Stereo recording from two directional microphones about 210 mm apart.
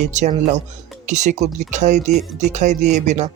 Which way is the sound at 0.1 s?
35° right (ahead or behind).